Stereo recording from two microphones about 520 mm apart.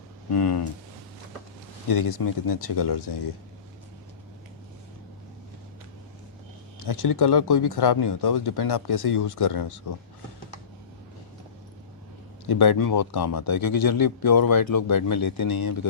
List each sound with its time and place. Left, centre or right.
0.3 s speech: left
2.0 s speech: left
2.7 s speech: left
6.8 s speech: left
12.5 s speech: left